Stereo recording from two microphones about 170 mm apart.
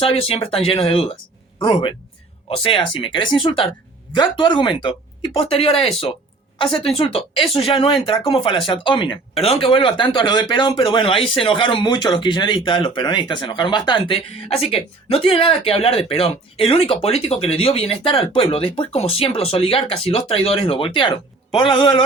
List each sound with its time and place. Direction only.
0.0 s speech: 35° left (ahead or behind)